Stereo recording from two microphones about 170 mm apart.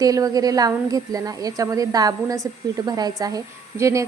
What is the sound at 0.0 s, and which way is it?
A woman's voice, 20° right (ahead or behind).